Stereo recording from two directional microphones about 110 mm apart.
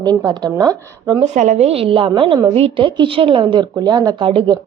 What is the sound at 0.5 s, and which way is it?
Speech, 35° right (ahead or behind).